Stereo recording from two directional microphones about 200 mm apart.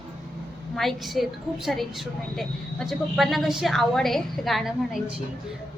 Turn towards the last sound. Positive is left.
turn(degrees=0)  # may be behind; listen again after turning